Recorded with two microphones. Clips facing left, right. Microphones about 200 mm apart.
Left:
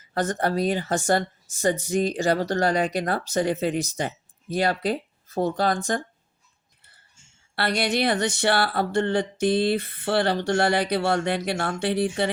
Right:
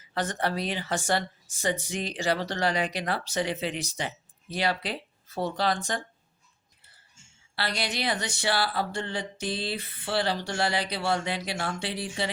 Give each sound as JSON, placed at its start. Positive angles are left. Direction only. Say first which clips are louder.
{"t": 0.1, "sound": "speech", "louder": "left 5 dB", "side_deg": 45}
{"t": 7.5, "sound": "speech", "louder": "left 8 dB", "side_deg": 55}